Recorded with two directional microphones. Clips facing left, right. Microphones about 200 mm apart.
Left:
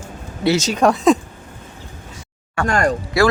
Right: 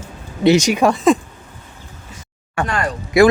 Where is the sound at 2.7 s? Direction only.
45° left (ahead or behind).